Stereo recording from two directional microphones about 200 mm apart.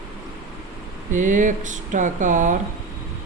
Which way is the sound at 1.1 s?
40° right (ahead or behind).